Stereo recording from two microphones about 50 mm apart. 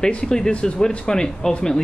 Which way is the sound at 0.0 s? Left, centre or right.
Centre.